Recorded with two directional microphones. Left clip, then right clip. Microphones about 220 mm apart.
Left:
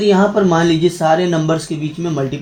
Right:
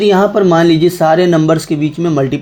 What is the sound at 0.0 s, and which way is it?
Speech, 45° right (ahead or behind).